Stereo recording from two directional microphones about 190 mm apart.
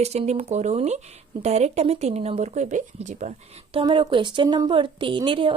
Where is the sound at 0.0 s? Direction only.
35° right (ahead or behind).